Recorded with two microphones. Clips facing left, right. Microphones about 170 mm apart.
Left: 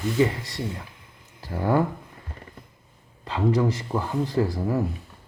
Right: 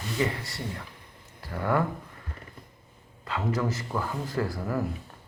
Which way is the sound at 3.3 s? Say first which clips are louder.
Left 6 dB; 25° left (ahead or behind).